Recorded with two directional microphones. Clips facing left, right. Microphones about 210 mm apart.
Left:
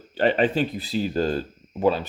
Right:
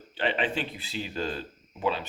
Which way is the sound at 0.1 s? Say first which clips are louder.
Left 8 dB; 40° left (ahead or behind).